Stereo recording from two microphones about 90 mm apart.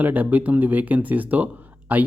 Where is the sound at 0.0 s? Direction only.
20° right (ahead or behind).